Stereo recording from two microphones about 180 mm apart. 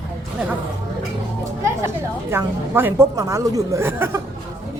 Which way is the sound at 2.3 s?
10° right (ahead or behind).